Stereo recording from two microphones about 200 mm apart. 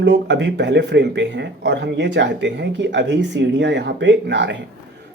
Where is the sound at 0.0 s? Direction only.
60° right (ahead or behind).